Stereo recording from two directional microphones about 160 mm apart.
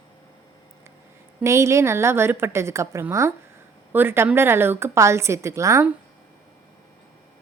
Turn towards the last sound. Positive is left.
turn(degrees=-20)  # may be behind; listen again after turning